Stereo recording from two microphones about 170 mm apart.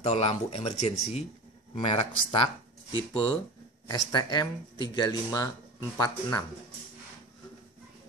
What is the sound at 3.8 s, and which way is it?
Speech, 25° left (ahead or behind).